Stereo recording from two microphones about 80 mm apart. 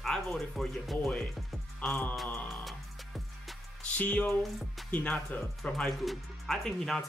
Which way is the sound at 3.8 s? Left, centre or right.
Centre.